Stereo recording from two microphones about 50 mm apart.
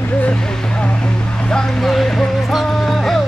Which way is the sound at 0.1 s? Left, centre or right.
Left.